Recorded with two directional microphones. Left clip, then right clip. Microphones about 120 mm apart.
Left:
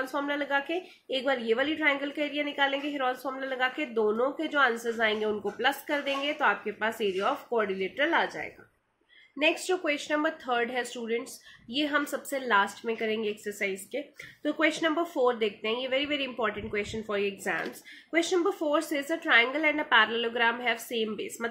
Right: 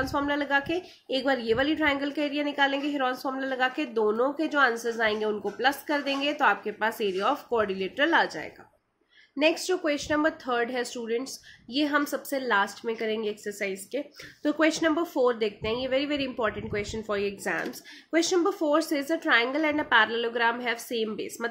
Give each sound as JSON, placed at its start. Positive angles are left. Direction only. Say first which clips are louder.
{"t": 0.0, "sound": "speech", "louder": "right 3 dB", "side_deg": -35}
{"t": 13.9, "sound": "speech", "louder": "right 3 dB", "side_deg": -40}